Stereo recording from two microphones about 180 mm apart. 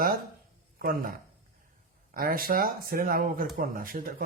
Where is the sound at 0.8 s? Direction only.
50° right (ahead or behind).